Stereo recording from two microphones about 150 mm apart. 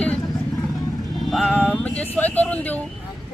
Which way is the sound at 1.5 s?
10° left (ahead or behind).